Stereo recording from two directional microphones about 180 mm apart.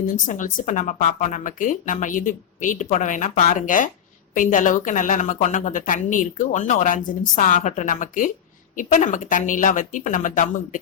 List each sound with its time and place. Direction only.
0.0 s a woman's voice: 45° left (ahead or behind)